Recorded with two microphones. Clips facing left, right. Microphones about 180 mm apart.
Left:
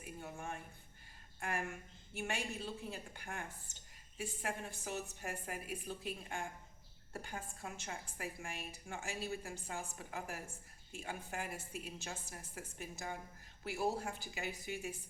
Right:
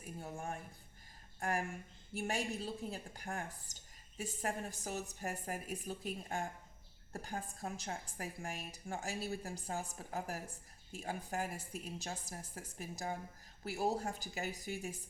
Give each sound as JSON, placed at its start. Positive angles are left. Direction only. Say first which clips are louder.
{"t": 0.0, "sound": "a woman's voice", "louder": "right 2 dB", "side_deg": -35}